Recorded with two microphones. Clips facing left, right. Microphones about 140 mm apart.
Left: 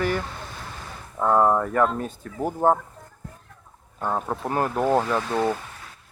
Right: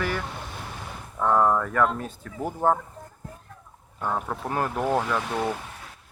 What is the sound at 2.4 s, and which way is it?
Speech, 10° left (ahead or behind).